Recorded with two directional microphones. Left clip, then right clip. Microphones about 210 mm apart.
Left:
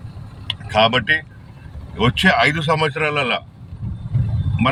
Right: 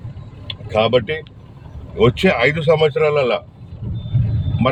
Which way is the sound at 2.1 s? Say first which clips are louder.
Left 1 dB; centre (ahead or behind).